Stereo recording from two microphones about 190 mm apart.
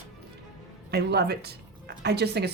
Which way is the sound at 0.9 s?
60° right (ahead or behind).